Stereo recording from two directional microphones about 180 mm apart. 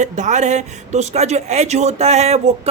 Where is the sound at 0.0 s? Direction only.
40° right (ahead or behind).